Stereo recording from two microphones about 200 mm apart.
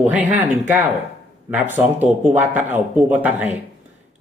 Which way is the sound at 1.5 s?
10° right (ahead or behind).